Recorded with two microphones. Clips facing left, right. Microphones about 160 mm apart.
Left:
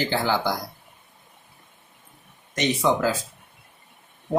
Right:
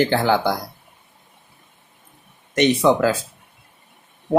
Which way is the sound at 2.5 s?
65° right (ahead or behind).